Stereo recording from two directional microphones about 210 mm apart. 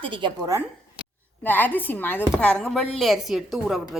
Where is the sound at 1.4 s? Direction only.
10° left (ahead or behind).